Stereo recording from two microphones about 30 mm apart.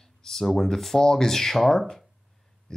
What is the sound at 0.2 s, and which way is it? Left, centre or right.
Speech, centre.